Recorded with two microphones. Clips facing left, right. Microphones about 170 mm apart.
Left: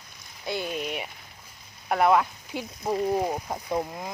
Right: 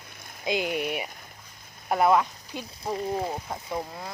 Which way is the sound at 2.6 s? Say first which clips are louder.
Left 4 dB; 10° left (ahead or behind).